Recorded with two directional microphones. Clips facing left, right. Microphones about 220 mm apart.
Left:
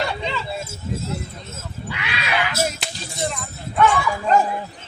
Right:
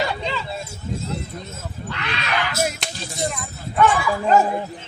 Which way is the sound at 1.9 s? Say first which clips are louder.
Even; 10° left (ahead or behind).